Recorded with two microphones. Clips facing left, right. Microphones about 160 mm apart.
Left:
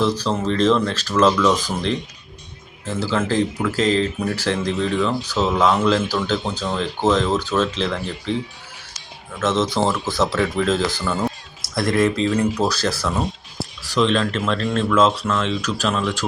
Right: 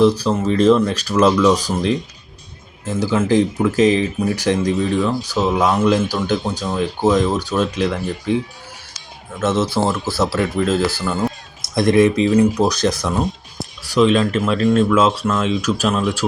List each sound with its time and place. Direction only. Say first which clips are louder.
0.0 s speech: right 5 dB; 10° right (ahead or behind)
9.4 s speech: right 2 dB; 10° right (ahead or behind)
11.6 s speech: right 5 dB; 20° right (ahead or behind)